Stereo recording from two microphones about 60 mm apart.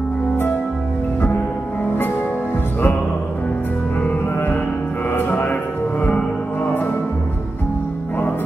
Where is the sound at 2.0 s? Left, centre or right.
Left.